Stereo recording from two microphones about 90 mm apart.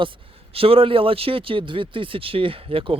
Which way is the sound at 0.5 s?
90° right.